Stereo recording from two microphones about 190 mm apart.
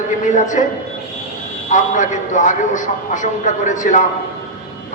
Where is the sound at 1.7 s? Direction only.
40° left (ahead or behind).